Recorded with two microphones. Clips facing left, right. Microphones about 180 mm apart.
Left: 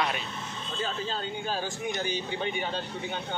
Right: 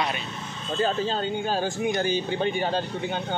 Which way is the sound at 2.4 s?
35° right (ahead or behind).